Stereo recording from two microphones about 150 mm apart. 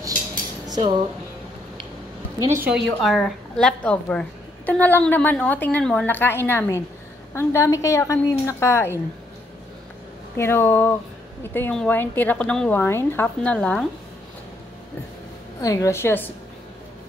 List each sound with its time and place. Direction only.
0.3 s cutlery: 25° right (ahead or behind)
2.4 s a woman's voice: 20° right (ahead or behind)
2.7 s a woman's voice: centre (ahead or behind); by 9.0 s 15° left (ahead or behind)
10.3 s a woman's voice: 15° left (ahead or behind)
15.6 s a woman's voice: 20° left (ahead or behind)